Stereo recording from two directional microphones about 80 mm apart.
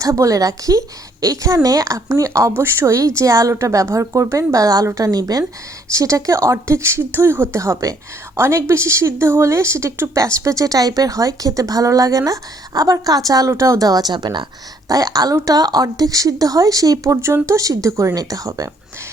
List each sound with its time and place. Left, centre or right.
0.0 s speech: right
14.8 s speech: right